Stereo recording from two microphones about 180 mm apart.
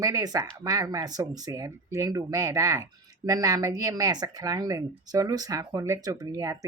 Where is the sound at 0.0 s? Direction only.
20° right (ahead or behind).